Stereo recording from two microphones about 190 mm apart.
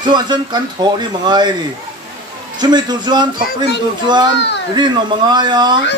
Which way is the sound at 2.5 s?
25° right (ahead or behind).